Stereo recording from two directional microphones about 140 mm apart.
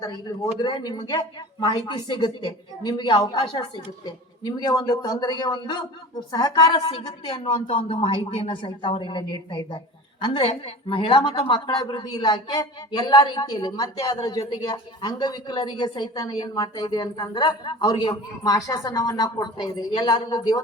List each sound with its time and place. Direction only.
0.6 s a woman's voice: 30° left (ahead or behind)